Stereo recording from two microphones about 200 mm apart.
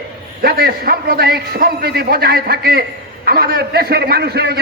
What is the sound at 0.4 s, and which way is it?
A man's voice, 50° right (ahead or behind).